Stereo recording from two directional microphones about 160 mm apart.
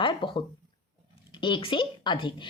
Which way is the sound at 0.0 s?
30° left (ahead or behind).